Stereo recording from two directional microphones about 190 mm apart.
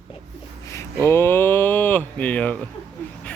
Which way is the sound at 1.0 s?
10° left (ahead or behind).